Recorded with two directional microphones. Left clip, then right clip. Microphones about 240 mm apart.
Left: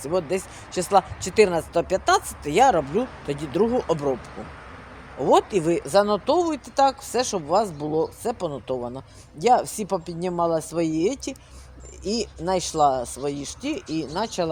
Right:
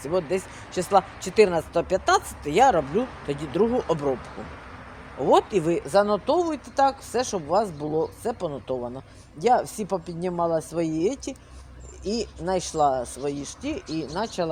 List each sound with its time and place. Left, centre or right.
0.0 s speech: centre
5.2 s speech: centre